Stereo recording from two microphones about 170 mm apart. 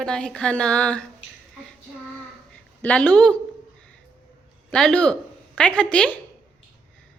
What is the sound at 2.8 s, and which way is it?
Speech, 10° left (ahead or behind).